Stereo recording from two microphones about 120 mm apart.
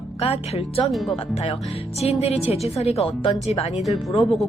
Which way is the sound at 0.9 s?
Centre (ahead or behind).